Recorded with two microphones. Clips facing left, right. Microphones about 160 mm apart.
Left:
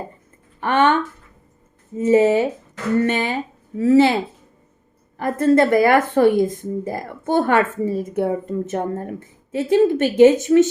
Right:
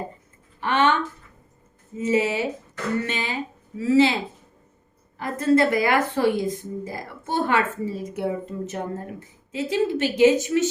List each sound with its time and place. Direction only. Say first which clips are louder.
0.6 s a woman's voice: left 4 dB; 50° left (ahead or behind)
2.0 s a woman's voice: left 8 dB; 45° left (ahead or behind)